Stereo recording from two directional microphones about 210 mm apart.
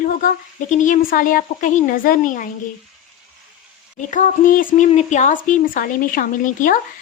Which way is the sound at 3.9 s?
35° left (ahead or behind).